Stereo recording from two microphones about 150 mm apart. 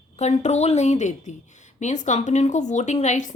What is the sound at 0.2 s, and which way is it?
Speech, 50° left (ahead or behind).